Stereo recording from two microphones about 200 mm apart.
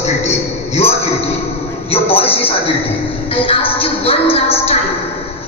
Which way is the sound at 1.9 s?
30° left (ahead or behind).